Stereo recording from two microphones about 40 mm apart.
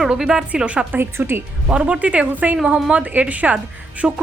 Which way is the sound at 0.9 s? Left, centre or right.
Right.